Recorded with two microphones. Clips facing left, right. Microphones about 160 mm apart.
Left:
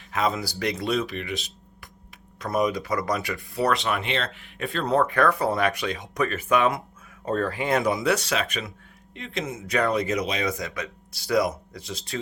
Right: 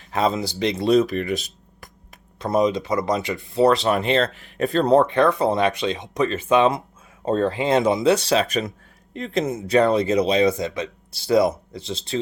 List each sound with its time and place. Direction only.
0.1 s speech: 30° right (ahead or behind)
0.9 s speech: 40° right (ahead or behind)
2.4 s speech: 25° right (ahead or behind)